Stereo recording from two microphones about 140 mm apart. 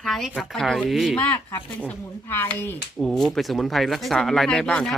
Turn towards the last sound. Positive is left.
turn(degrees=5)  # may be behind; listen again after turning